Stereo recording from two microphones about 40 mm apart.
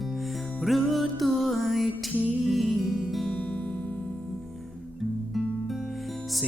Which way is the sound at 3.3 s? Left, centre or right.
Left.